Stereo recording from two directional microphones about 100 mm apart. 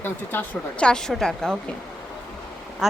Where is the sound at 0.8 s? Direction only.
10° left (ahead or behind).